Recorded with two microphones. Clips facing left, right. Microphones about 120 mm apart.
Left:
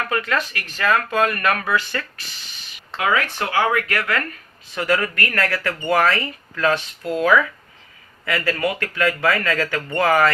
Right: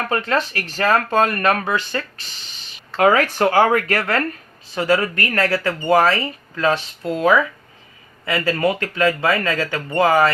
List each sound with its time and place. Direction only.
0.0 s speech: 30° right (ahead or behind)
3.0 s speech: 45° right (ahead or behind); by 10.3 s 20° right (ahead or behind)